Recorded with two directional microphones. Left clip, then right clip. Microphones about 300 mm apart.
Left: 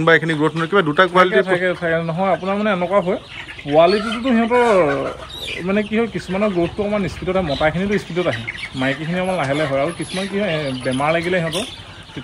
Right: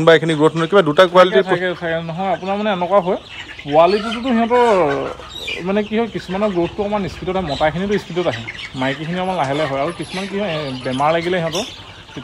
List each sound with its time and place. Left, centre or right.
0.0 s a man's voice: centre